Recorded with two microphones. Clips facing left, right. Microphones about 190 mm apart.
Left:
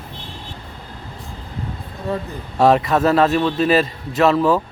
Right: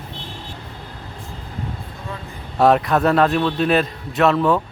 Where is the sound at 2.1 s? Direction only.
35° left (ahead or behind).